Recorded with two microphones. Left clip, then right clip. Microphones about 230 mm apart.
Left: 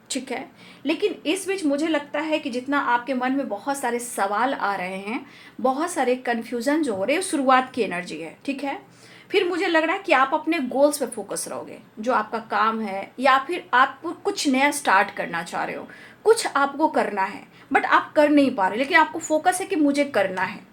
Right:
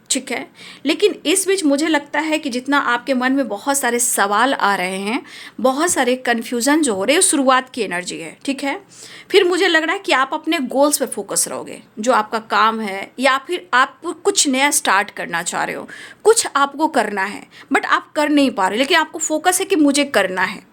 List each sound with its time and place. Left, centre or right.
0.1 s a woman's voice: right